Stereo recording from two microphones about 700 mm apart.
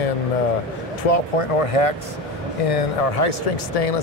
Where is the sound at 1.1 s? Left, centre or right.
Left.